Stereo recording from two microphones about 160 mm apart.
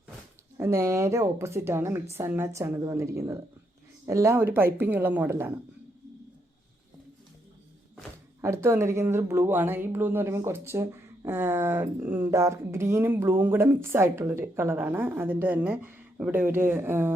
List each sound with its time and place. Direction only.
0.5 s speech: 15° right (ahead or behind)
8.4 s speech: 15° right (ahead or behind)